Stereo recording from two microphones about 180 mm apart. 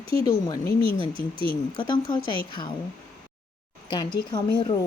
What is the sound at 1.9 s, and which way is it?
Speech, 25° left (ahead or behind).